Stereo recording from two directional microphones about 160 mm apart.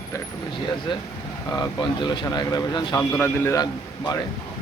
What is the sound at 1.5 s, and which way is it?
Speech, 25° left (ahead or behind).